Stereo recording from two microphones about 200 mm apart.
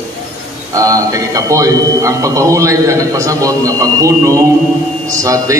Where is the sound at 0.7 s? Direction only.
15° right (ahead or behind).